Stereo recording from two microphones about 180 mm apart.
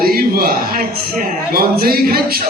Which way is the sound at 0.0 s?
55° right (ahead or behind).